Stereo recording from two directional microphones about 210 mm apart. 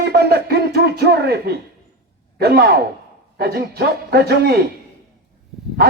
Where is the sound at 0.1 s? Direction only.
50° right (ahead or behind).